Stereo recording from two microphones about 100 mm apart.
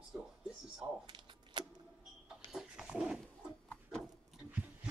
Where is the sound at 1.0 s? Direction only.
50° right (ahead or behind).